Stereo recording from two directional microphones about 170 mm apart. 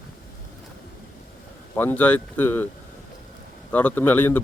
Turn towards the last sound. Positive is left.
turn(degrees=10)  # may be behind; listen again after turning